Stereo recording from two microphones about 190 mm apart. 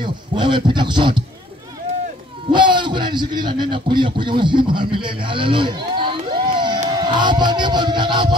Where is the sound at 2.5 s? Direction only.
25° right (ahead or behind).